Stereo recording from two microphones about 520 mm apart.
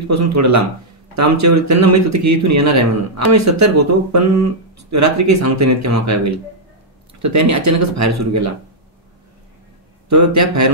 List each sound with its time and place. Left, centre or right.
0.1 s speech: right
10.0 s speech: right